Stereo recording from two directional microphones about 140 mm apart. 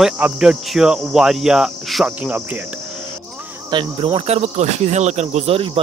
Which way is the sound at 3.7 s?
40° right (ahead or behind).